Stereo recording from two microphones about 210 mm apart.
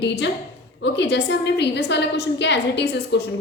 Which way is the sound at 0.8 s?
55° left (ahead or behind).